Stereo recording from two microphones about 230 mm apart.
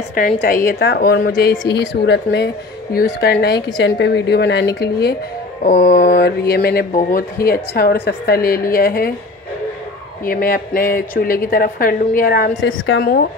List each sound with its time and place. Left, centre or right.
0.2 s a woman's voice: left
10.2 s a woman's voice: left
12.6 s a woman's voice: left